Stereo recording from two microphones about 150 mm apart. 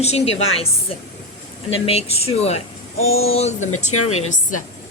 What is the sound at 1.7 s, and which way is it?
Speech, 40° left (ahead or behind).